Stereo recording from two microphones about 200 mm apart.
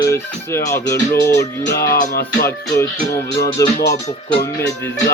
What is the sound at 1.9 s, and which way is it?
Music, 50° left (ahead or behind).